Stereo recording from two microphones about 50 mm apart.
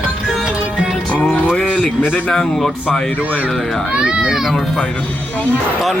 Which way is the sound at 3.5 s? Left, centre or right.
Centre.